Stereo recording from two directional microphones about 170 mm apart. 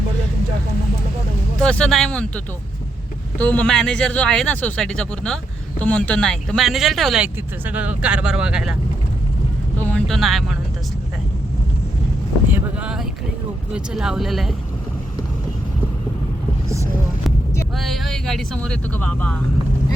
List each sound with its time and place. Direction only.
1.5 s speech: 5° left (ahead or behind)
9.7 s vehicle: 10° left (ahead or behind)
10.1 s speech: centre (ahead or behind)
12.5 s speech: 10° right (ahead or behind)
16.6 s a sound: 20° right (ahead or behind)
17.7 s speech: centre (ahead or behind)